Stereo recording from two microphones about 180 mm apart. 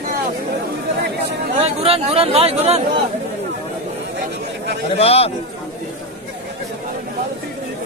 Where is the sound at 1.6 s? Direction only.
35° right (ahead or behind).